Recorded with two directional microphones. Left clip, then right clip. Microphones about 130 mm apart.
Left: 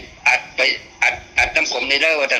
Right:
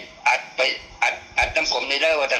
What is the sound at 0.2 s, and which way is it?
A man's voice, 25° left (ahead or behind).